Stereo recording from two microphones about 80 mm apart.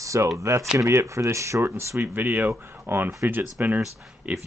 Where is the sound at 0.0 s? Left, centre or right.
Right.